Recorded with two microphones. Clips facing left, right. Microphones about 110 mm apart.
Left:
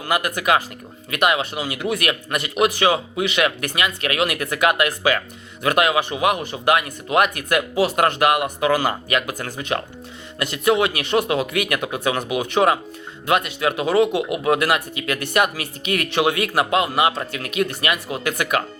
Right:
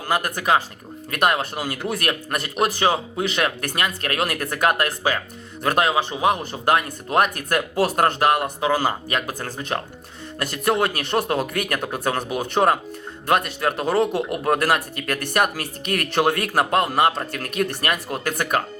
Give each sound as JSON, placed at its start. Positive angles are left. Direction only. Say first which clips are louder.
{"t": 0.1, "sound": "speech", "louder": "left 1 dB", "side_deg": -35}
{"t": 14.2, "sound": "speech", "louder": "left 2 dB", "side_deg": 5}
{"t": 14.4, "sound": "speech", "louder": "even", "side_deg": -40}